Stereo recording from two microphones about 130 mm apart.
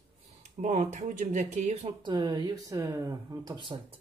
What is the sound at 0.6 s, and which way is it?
Speech, 70° right (ahead or behind).